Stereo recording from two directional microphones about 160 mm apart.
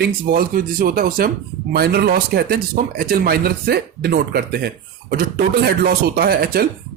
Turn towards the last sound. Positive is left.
turn(degrees=-70)  # may be behind; listen again after turning